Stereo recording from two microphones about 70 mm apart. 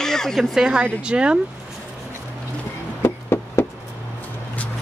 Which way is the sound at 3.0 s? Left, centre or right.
Left.